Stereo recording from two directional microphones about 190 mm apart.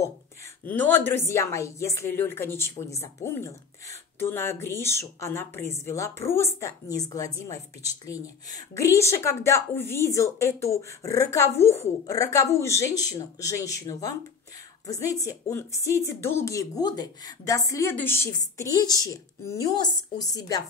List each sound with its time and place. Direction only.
0.7 s speech: 10° left (ahead or behind)
8.7 s a woman's voice: 15° left (ahead or behind)